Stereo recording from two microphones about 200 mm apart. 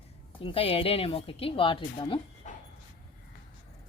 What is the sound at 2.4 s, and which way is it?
Dog, 35° left (ahead or behind).